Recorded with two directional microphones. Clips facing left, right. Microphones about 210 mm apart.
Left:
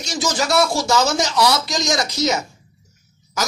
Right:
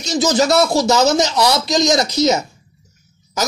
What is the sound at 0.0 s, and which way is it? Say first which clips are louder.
A man's voice: right 7 dB; 20° right (ahead or behind).